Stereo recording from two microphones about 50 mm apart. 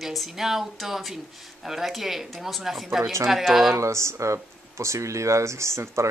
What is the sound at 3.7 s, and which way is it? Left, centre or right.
Speech, right.